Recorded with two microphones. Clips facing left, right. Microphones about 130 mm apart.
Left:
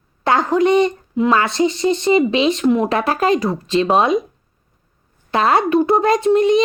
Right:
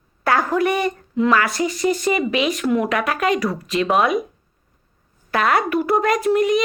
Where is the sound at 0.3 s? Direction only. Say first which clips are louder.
Left 4 dB; 20° left (ahead or behind).